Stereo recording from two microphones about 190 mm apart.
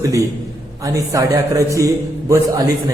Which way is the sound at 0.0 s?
15° right (ahead or behind).